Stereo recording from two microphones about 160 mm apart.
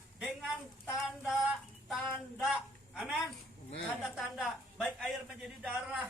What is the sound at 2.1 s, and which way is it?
Speech, centre (ahead or behind).